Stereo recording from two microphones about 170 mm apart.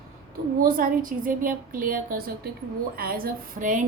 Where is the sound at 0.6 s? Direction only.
55° right (ahead or behind).